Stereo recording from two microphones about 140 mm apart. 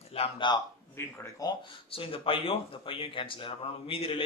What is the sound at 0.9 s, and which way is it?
Speech, 20° left (ahead or behind).